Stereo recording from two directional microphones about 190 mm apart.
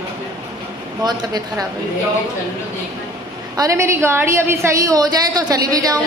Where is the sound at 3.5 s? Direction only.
15° right (ahead or behind).